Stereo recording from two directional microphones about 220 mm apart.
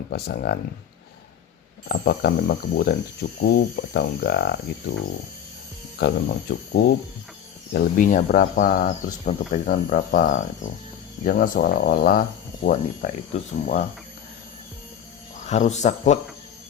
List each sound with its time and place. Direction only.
0.1 s speech: 45° left (ahead or behind)
1.9 s speech: 45° left (ahead or behind)
6.0 s speech: 50° left (ahead or behind)
15.4 s speech: 30° left (ahead or behind)